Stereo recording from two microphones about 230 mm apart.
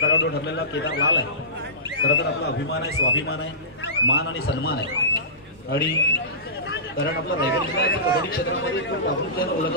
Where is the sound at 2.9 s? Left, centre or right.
Left.